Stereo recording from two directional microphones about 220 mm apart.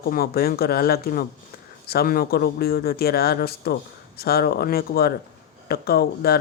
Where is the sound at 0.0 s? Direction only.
45° left (ahead or behind).